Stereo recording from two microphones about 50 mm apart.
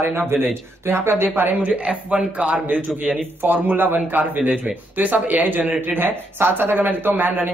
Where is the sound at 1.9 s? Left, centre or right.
Right.